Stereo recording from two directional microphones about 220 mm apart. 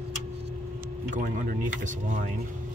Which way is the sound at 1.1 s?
35° right (ahead or behind).